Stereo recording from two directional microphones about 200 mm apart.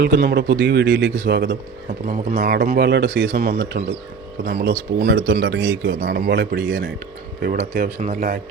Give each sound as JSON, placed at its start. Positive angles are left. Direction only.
{"t": 0.0, "sound": "a man's voice", "side_deg": -55}
{"t": 2.0, "sound": "speech", "side_deg": -45}
{"t": 4.9, "sound": "a man's voice", "side_deg": -65}
{"t": 7.9, "sound": "speech", "side_deg": -40}